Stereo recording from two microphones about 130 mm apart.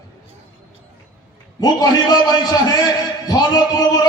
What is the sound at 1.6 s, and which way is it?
A man's voice, 30° left (ahead or behind).